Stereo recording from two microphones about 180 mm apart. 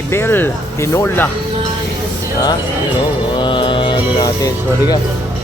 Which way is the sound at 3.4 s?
25° left (ahead or behind).